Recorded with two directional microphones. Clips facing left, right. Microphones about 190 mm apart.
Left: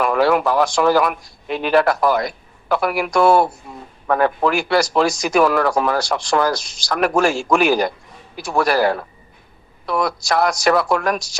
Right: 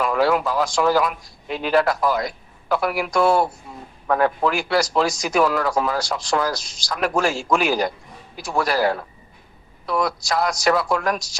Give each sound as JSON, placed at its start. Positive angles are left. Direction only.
{"t": 0.0, "sound": "a man's voice", "side_deg": 65}